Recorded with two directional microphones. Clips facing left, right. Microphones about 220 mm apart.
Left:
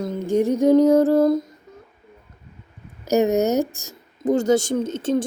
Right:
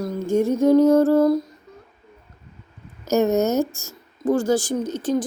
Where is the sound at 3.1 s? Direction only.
15° left (ahead or behind).